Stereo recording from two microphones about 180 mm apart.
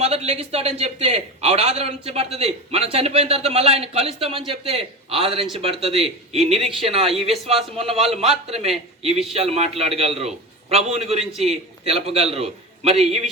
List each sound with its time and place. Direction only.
0.0 s a man's voice: 35° right (ahead or behind)